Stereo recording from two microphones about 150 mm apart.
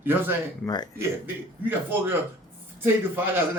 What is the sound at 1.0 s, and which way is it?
A man's voice, 15° right (ahead or behind).